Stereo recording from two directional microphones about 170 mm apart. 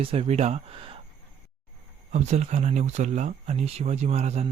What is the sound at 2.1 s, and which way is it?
Speech, 40° right (ahead or behind).